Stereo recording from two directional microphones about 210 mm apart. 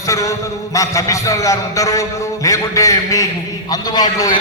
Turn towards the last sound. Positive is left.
turn(degrees=20)  # may be behind; listen again after turning